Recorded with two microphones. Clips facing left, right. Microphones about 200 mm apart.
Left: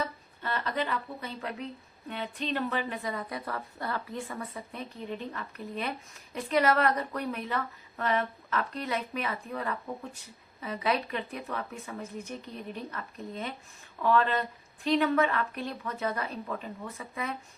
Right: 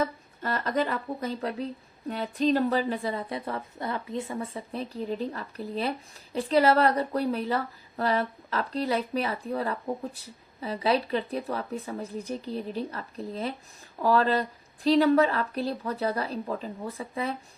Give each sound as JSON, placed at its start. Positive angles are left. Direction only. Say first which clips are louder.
{"t": 0.0, "sound": "a woman's voice", "louder": "right 5 dB", "side_deg": -40}